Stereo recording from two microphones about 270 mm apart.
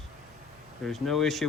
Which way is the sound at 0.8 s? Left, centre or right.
Centre.